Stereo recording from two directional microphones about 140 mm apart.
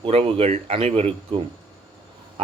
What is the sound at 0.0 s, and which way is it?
Speech, 40° right (ahead or behind).